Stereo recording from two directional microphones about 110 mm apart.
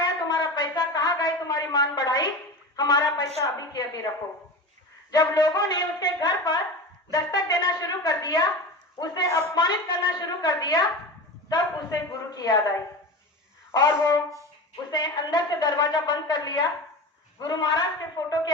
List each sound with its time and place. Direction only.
0.0 s a sound: 40° left (ahead or behind)
2.7 s a woman's voice: 40° left (ahead or behind)
5.1 s a woman's voice: 35° left (ahead or behind)